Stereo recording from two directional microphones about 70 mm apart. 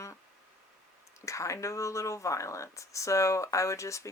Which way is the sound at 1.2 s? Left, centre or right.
Left.